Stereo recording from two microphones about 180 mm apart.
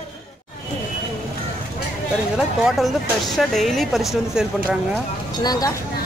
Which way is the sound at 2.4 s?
Centre (ahead or behind).